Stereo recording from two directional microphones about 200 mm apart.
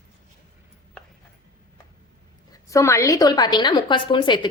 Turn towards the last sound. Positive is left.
turn(degrees=25)  # may be behind; listen again after turning